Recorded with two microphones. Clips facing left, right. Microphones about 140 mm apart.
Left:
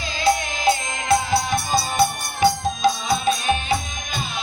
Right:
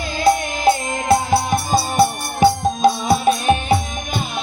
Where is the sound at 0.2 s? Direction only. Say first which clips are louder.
Right 4 dB; 50° right (ahead or behind).